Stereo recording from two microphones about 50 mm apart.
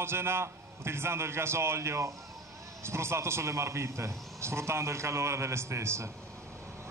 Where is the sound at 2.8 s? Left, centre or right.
Right.